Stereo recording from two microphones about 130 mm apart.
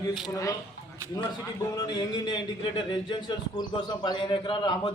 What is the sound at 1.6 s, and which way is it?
Speech, 25° left (ahead or behind).